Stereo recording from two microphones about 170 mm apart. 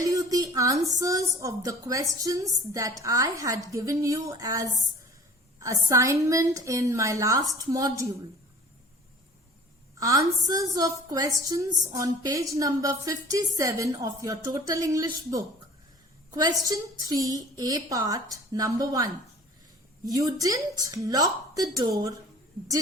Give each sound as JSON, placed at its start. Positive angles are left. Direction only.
{"t": 0.0, "sound": "a woman's voice", "side_deg": -20}
{"t": 10.0, "sound": "a woman's voice", "side_deg": -20}